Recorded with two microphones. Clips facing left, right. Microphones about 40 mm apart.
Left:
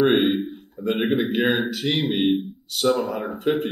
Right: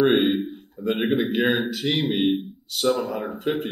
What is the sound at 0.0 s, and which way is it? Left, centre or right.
A man's voice, centre.